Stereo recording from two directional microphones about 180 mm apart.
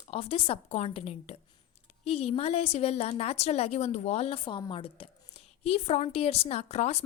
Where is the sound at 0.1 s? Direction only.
35° left (ahead or behind).